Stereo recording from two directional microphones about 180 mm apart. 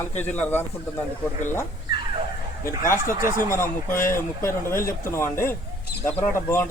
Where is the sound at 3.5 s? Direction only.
15° left (ahead or behind).